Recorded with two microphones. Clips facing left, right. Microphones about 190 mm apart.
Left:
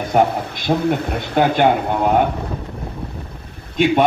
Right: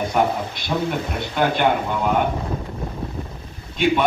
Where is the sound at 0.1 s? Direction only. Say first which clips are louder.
Left 8 dB; 50° left (ahead or behind).